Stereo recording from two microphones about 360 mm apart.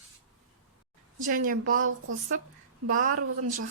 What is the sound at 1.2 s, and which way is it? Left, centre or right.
Speech, right.